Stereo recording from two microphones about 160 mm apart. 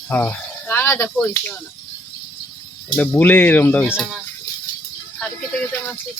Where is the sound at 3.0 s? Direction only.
10° left (ahead or behind).